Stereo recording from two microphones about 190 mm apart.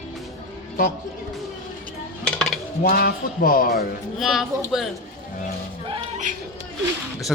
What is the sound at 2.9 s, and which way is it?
Speech, 50° left (ahead or behind).